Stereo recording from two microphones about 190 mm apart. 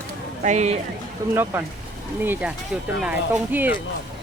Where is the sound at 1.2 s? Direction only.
15° right (ahead or behind).